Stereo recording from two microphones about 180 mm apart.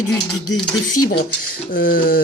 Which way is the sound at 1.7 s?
50° left (ahead or behind).